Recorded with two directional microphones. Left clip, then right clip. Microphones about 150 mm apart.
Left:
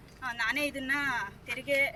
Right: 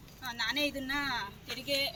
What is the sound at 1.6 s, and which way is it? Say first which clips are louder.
Speech: left 4 dB; 10° right (ahead or behind).